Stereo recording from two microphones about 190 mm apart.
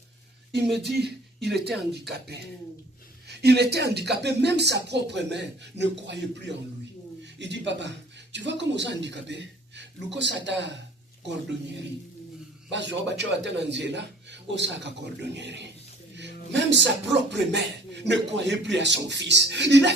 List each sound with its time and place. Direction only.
0.9 s speech: 60° right (ahead or behind)
12.7 s speech: 65° right (ahead or behind)